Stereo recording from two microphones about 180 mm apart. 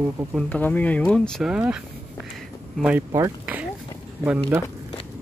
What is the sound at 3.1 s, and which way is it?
Speech, 20° right (ahead or behind).